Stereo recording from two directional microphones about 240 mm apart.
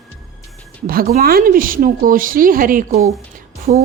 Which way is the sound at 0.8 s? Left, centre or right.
Right.